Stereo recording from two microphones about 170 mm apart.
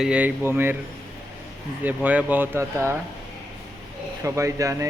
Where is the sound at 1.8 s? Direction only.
10° right (ahead or behind).